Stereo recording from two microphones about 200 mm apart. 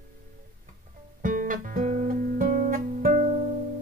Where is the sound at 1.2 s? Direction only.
40° right (ahead or behind).